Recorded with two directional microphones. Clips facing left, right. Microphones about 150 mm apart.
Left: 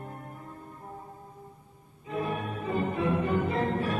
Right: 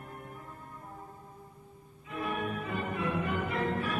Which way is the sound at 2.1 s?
30° left (ahead or behind).